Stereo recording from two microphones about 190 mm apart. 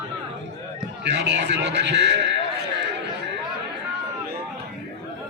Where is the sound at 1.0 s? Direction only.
65° right (ahead or behind).